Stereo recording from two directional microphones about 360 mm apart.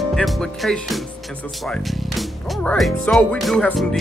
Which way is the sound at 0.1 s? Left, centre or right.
Centre.